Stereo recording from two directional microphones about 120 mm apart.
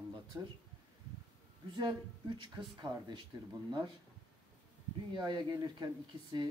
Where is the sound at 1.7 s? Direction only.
40° right (ahead or behind).